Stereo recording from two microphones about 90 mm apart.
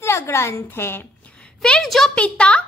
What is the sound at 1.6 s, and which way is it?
A woman's voice, 10° left (ahead or behind).